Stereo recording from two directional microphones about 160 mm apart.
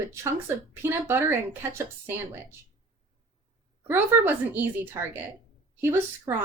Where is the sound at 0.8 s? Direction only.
15° right (ahead or behind).